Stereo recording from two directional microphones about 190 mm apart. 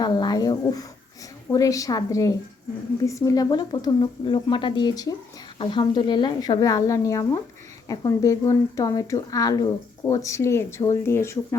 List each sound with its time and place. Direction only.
0.0 s speech: 20° left (ahead or behind)